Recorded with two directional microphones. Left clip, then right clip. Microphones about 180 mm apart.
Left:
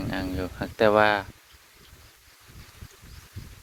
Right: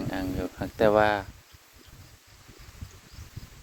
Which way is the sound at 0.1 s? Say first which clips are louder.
Left 2 dB; 20° right (ahead or behind).